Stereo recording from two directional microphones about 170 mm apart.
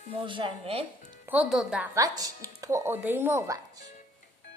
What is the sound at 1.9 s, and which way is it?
Speech, 20° right (ahead or behind).